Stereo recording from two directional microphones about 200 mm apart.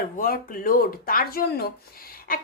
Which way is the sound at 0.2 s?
45° left (ahead or behind).